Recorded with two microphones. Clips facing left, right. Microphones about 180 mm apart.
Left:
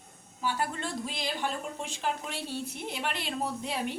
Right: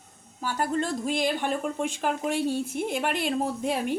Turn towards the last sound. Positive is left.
turn(degrees=-50)  # may be behind; listen again after turning